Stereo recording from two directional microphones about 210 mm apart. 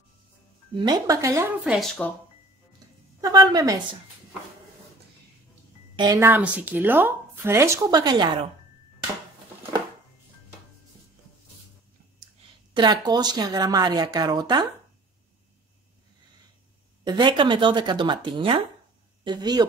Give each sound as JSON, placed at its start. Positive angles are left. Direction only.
{"t": 0.7, "sound": "speech", "side_deg": -20}
{"t": 3.2, "sound": "speech", "side_deg": -20}
{"t": 5.9, "sound": "speech", "side_deg": -15}
{"t": 12.7, "sound": "speech", "side_deg": -20}
{"t": 17.0, "sound": "speech", "side_deg": -20}